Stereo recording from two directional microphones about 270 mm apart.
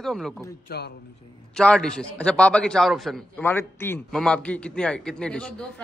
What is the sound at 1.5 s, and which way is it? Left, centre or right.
A man's voice, centre.